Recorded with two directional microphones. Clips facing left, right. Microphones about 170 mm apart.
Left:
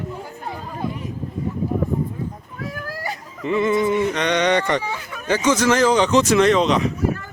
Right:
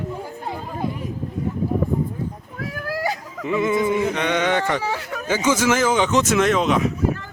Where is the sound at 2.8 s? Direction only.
80° right.